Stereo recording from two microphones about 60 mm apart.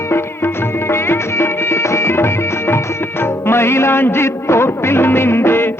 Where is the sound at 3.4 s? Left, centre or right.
Left.